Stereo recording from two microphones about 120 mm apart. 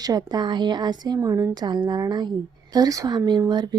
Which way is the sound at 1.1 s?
25° right (ahead or behind).